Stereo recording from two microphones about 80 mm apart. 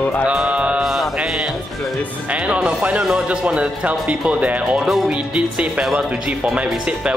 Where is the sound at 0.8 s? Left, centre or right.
Centre.